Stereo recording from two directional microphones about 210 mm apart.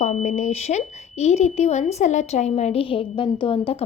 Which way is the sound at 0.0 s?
35° left (ahead or behind).